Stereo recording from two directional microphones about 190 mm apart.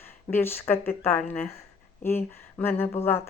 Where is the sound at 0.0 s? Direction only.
10° left (ahead or behind).